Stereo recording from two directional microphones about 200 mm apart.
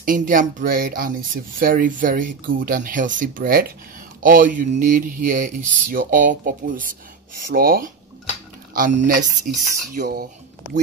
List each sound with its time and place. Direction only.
0.0 s speech: 40° right (ahead or behind)